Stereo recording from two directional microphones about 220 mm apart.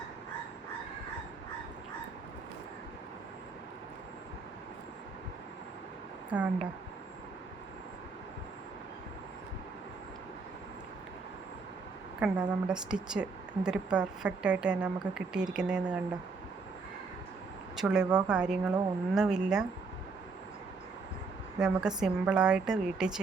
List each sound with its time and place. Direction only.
6.3 s speech: 5° right (ahead or behind)
12.2 s a woman's voice: 5° right (ahead or behind)
17.7 s a woman's voice: 5° right (ahead or behind)
21.6 s a woman's voice: 5° right (ahead or behind)